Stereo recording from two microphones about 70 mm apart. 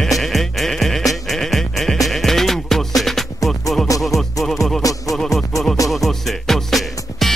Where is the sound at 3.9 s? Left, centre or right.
Left.